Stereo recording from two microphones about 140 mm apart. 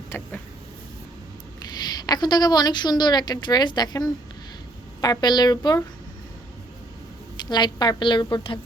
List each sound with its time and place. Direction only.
0.1 s vehicle: 15° left (ahead or behind)
1.8 s a woman's voice: 30° left (ahead or behind)
7.5 s a woman's voice: 30° left (ahead or behind)